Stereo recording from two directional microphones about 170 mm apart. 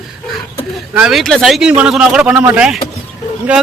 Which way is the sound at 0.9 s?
5° right (ahead or behind).